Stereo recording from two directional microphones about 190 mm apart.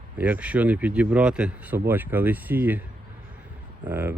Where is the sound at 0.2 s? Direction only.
10° right (ahead or behind).